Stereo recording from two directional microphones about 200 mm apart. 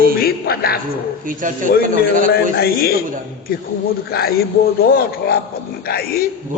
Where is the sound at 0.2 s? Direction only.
50° left (ahead or behind).